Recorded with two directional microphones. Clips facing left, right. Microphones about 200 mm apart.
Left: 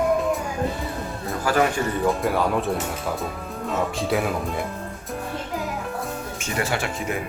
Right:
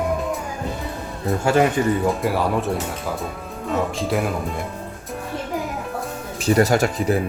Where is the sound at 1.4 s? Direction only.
25° right (ahead or behind).